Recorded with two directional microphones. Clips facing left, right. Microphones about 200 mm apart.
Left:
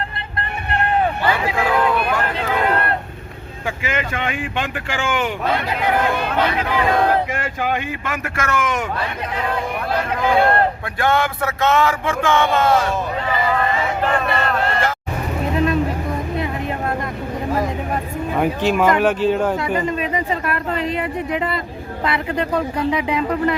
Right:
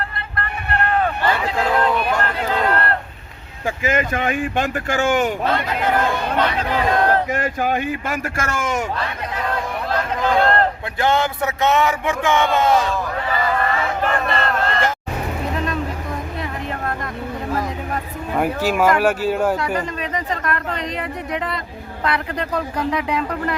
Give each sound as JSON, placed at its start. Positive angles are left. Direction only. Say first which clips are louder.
{"t": 0.3, "sound": "vehicle", "louder": "even", "side_deg": 20}
{"t": 1.3, "sound": "a sound", "louder": "left 1 dB", "side_deg": 10}
{"t": 3.8, "sound": "speech", "louder": "right 4 dB", "side_deg": -40}
{"t": 5.5, "sound": "speech", "louder": "even", "side_deg": 10}
{"t": 7.3, "sound": "speech", "louder": "right 2 dB", "side_deg": -40}
{"t": 9.9, "sound": "speech", "louder": "left 1 dB", "side_deg": 10}
{"t": 10.9, "sound": "speech", "louder": "right 1 dB", "side_deg": -20}
{"t": 12.9, "sound": "crowd", "louder": "left 1 dB", "side_deg": 15}
{"t": 15.5, "sound": "a sound", "louder": "left 9 dB", "side_deg": 5}
{"t": 18.3, "sound": "speech", "louder": "left 1 dB", "side_deg": -5}